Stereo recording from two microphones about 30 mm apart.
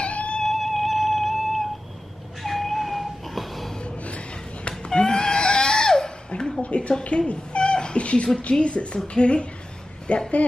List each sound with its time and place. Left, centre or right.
0.0 s cat: left
0.5 s a sound: centre
2.4 s cat: centre
3.8 s gasp: left
4.6 s goat: left
6.6 s a woman's voice: left